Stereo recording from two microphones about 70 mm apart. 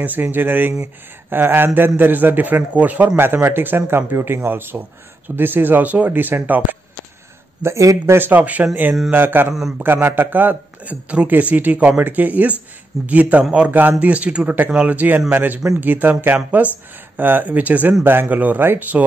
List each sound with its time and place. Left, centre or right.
0.0 s a man's voice: right
3.3 s a man's voice: right
7.6 s speech: right
8.2 s a man's voice: right
9.5 s a man's voice: centre
9.9 s a man's voice: right